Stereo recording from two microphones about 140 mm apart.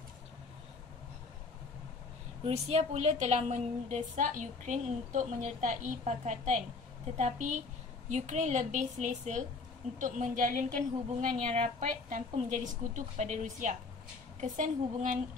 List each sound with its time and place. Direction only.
2.4 s a woman's voice: 50° right (ahead or behind); by 10.6 s 70° right (ahead or behind)
11.3 s a woman's voice: 50° right (ahead or behind); by 15.1 s 65° right (ahead or behind)